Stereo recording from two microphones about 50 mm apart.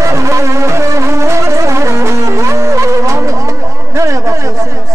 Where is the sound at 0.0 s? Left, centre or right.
Right.